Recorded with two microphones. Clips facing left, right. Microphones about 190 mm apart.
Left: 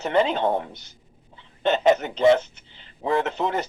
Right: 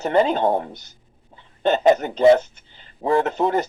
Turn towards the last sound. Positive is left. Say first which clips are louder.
# right 5 dB
turn(degrees=-40)  # may be behind; listen again after turning